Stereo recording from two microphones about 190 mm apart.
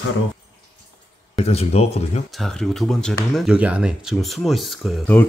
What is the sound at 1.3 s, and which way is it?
Speech, 35° left (ahead or behind).